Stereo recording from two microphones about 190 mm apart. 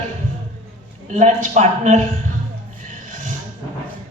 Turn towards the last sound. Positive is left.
turn(degrees=-45)  # may be behind; listen again after turning